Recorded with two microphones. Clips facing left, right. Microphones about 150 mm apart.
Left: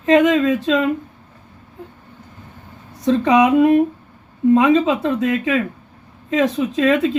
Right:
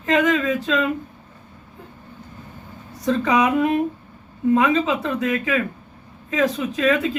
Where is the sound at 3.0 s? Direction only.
25° left (ahead or behind).